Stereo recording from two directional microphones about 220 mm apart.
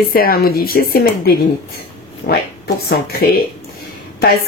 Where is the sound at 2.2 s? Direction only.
35° left (ahead or behind).